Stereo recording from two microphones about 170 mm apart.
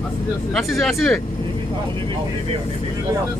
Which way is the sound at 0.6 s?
Centre (ahead or behind).